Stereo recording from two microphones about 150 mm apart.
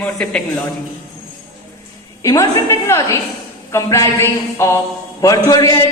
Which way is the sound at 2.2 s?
20° left (ahead or behind).